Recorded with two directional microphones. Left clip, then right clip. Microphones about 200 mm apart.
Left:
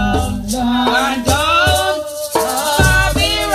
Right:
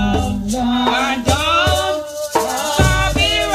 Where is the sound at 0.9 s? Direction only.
20° right (ahead or behind).